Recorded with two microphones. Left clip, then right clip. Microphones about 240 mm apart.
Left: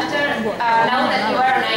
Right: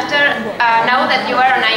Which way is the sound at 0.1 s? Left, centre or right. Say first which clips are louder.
Right 5 dB; centre.